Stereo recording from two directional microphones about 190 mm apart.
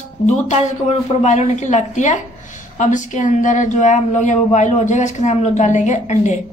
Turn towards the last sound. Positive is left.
turn(degrees=40)  # may be behind; listen again after turning